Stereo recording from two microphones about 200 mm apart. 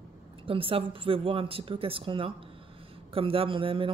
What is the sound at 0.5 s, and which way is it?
A woman's voice, 25° right (ahead or behind).